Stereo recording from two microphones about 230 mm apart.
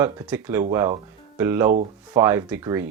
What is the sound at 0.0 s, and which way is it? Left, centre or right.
Speech, centre.